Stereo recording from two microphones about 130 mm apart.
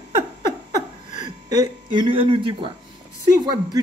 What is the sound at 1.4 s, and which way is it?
Speech, 35° right (ahead or behind).